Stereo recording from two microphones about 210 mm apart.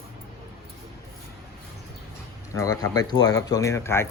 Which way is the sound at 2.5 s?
15° left (ahead or behind).